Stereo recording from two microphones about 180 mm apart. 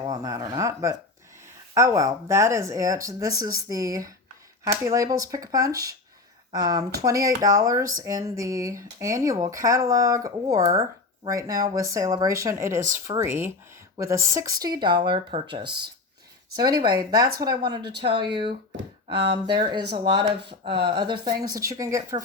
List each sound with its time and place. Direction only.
0.0 s speech: 20° right (ahead or behind)